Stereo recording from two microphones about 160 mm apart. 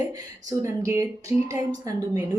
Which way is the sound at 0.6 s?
20° right (ahead or behind).